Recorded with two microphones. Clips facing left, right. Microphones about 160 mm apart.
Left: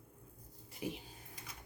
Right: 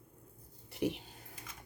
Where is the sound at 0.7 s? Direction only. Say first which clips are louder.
Right 7 dB; 70° right (ahead or behind).